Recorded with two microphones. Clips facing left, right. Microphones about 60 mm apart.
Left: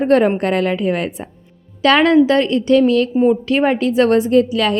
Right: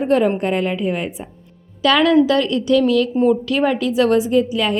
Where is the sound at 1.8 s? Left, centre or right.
Left.